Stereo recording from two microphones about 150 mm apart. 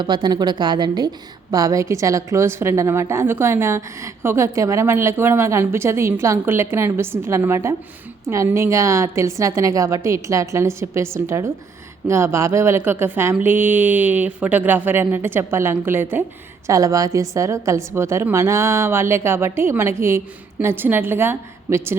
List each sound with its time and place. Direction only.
0.0 s a woman's voice: 30° right (ahead or behind)